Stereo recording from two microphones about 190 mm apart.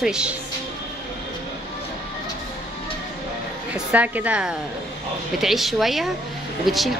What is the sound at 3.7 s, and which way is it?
A woman's voice, 10° right (ahead or behind).